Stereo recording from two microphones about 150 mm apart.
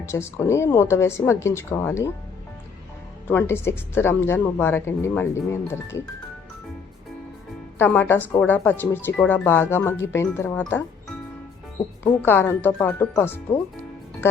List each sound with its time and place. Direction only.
0.0 s speech: 15° left (ahead or behind)
3.2 s speech: 15° left (ahead or behind)
7.8 s speech: 15° left (ahead or behind)
12.2 s speech: 15° left (ahead or behind)